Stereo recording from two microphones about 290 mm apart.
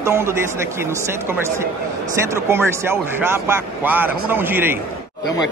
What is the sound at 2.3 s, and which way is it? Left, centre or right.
Speech, centre.